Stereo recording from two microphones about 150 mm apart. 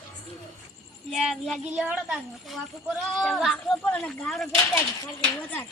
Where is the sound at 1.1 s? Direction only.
Centre (ahead or behind).